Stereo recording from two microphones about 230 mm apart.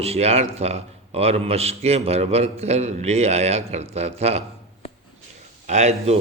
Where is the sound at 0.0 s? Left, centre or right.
Right.